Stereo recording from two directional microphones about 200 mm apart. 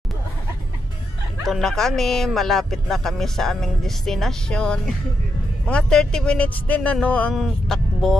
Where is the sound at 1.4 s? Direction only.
Centre (ahead or behind).